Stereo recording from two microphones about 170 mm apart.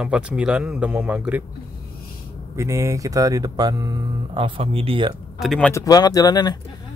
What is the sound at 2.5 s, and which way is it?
Speech, 15° right (ahead or behind).